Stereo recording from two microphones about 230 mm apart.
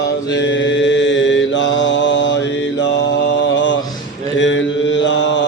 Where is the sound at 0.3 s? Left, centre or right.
Left.